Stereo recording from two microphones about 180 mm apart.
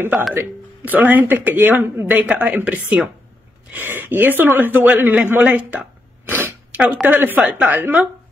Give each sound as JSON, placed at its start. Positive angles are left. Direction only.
{"t": 0.3, "sound": "speech", "side_deg": -10}